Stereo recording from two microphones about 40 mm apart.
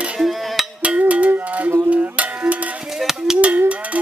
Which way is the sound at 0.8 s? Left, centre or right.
Right.